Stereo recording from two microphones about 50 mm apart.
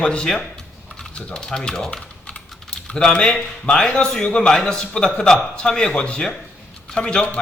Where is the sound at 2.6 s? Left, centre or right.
Centre.